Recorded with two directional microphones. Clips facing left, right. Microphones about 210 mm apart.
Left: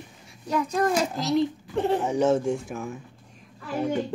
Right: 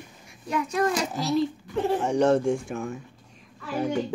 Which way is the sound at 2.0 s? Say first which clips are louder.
Right 1 dB; 5° left (ahead or behind).